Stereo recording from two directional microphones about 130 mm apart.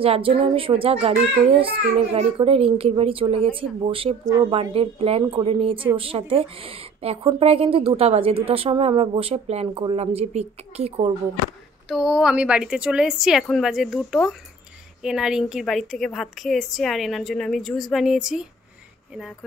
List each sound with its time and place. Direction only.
0.0 s a woman's voice: 50° right (ahead or behind)
11.9 s a woman's voice: 5° right (ahead or behind)